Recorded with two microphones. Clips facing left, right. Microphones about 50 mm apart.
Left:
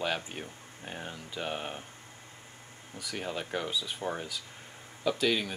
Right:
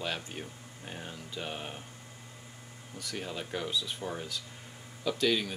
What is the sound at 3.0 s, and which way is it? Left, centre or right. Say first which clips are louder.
Speech: left 2 dB; centre.